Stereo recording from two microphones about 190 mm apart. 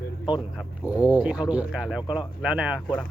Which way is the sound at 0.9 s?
5° right (ahead or behind).